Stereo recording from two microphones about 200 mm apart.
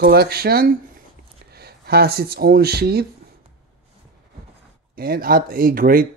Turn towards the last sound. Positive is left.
turn(degrees=-45)  # may be behind; listen again after turning